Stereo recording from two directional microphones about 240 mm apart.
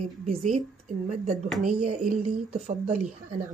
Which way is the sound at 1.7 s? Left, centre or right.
Right.